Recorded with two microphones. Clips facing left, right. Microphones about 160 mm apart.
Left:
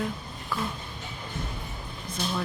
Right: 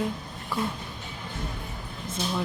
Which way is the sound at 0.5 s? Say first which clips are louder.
Right 2 dB; 25° right (ahead or behind).